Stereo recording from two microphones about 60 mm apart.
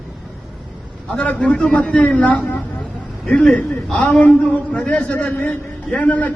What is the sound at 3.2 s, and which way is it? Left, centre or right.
A man's voice, centre.